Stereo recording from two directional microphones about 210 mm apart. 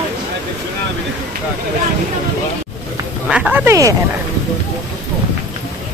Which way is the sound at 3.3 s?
5° right (ahead or behind).